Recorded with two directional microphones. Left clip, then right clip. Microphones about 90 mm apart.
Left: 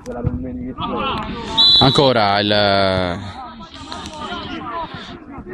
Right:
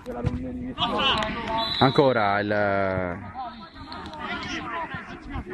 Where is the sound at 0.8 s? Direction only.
25° right (ahead or behind).